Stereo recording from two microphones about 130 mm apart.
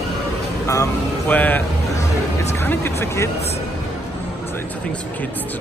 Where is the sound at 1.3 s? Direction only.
10° left (ahead or behind).